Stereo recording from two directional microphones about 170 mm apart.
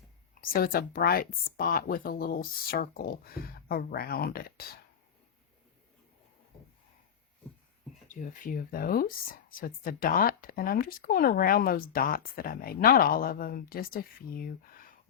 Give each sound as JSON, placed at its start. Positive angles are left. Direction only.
{"t": 0.5, "sound": "speech", "side_deg": 60}
{"t": 8.0, "sound": "speech", "side_deg": 50}